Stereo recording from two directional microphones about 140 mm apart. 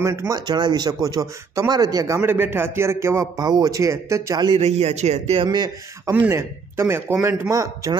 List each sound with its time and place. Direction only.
0.0 s speech: 20° right (ahead or behind)
0.5 s speech: 30° right (ahead or behind)
4.6 s a man's voice: 50° right (ahead or behind); by 6.2 s 30° right (ahead or behind)
6.2 s speech: 15° right (ahead or behind)